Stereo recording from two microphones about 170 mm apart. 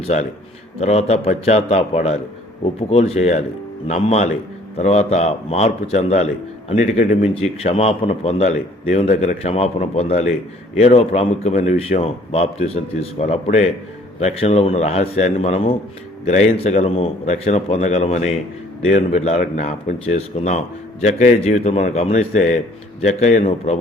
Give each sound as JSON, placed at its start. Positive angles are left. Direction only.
{"t": 0.8, "sound": "a man's voice", "side_deg": 40}